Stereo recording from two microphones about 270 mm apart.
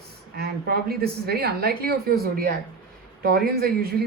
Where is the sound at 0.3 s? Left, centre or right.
Right.